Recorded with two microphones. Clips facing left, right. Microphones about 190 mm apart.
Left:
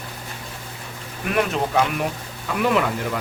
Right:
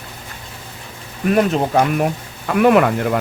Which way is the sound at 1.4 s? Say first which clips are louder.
Right 4 dB; 35° right (ahead or behind).